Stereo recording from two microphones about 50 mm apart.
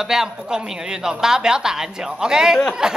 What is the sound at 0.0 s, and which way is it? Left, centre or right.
Speech, centre.